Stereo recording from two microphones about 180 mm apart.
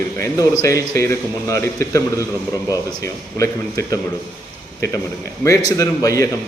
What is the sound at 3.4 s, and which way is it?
Speech, 20° left (ahead or behind).